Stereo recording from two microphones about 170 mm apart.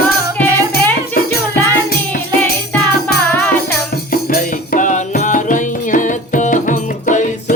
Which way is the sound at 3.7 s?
60° left (ahead or behind).